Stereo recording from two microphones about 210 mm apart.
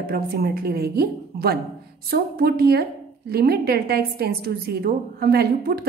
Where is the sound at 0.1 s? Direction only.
45° right (ahead or behind).